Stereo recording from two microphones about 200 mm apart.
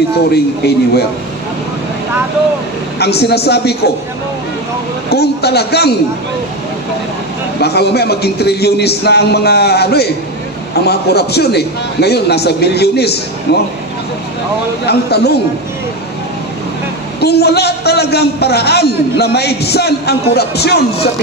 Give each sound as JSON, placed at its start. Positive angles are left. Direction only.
{"t": 0.3, "sound": "a man's voice", "side_deg": 55}
{"t": 3.0, "sound": "a man's voice", "side_deg": 55}
{"t": 5.1, "sound": "a man's voice", "side_deg": 55}
{"t": 7.6, "sound": "a man's voice", "side_deg": 55}
{"t": 14.9, "sound": "a man's voice", "side_deg": 55}
{"t": 17.2, "sound": "a man's voice", "side_deg": 55}